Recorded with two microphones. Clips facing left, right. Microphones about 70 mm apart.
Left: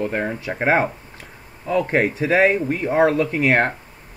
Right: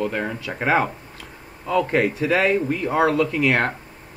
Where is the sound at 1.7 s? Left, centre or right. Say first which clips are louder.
Left 1 dB; left.